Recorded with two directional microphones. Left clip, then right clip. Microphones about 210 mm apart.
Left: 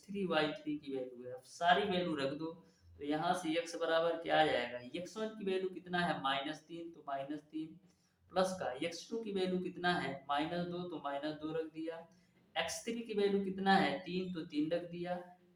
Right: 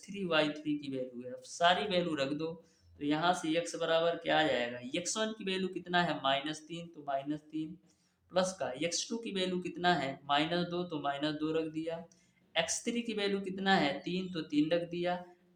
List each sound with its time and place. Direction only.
0.1 s speech: 40° right (ahead or behind)